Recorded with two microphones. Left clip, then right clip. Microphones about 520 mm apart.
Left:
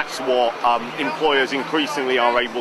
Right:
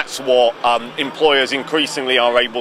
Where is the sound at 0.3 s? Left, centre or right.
Right.